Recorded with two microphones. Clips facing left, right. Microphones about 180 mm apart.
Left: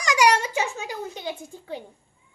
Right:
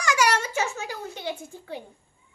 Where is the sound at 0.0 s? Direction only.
15° left (ahead or behind).